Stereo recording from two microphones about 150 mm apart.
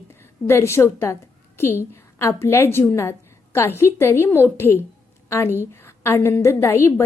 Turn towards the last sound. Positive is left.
turn(degrees=15)  # may be behind; listen again after turning